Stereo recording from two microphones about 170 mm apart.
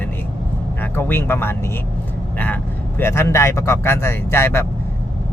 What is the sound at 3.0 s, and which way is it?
A man's voice, 15° left (ahead or behind).